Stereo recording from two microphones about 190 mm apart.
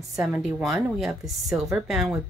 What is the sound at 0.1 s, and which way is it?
Speech, 15° right (ahead or behind).